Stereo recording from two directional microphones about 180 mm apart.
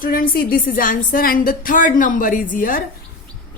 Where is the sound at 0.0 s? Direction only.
50° left (ahead or behind).